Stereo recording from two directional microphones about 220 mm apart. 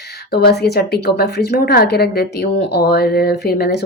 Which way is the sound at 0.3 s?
45° left (ahead or behind).